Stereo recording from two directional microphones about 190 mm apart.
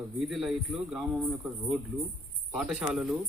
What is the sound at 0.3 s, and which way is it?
Speech, centre (ahead or behind).